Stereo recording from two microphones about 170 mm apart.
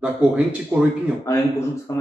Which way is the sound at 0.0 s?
5° right (ahead or behind).